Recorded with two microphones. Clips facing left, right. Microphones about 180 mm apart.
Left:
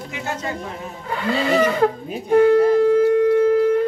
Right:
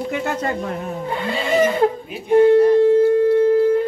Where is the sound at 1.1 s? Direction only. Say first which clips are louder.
Left 2 dB; 20° right (ahead or behind).